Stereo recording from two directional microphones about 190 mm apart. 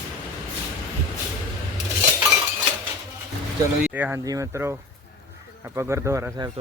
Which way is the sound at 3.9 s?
10° right (ahead or behind).